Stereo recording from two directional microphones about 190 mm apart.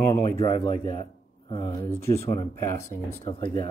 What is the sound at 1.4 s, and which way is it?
Speech, 25° left (ahead or behind).